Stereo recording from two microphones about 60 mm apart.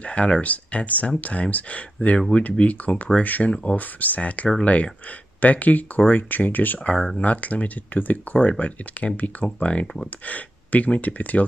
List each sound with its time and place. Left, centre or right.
0.0 s speech: left